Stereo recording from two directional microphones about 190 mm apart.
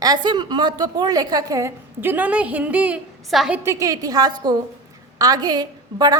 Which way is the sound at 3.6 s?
15° right (ahead or behind).